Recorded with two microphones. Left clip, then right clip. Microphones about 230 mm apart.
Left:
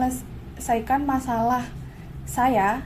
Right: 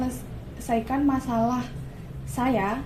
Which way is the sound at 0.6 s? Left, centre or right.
Left.